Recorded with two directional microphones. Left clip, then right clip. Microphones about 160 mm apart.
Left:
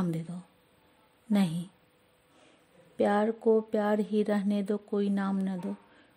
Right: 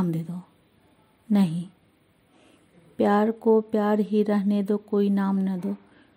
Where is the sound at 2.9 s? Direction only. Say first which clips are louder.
Right 5 dB; 10° left (ahead or behind).